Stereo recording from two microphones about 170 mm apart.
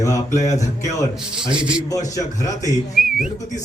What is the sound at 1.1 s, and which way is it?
Speech, 5° right (ahead or behind).